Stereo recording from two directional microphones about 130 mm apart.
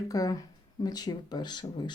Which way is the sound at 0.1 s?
25° left (ahead or behind).